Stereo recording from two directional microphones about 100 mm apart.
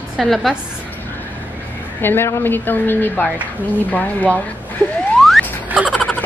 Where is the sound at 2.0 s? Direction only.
20° left (ahead or behind).